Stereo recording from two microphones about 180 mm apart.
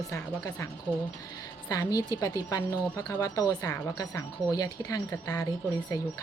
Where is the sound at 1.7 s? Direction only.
20° left (ahead or behind).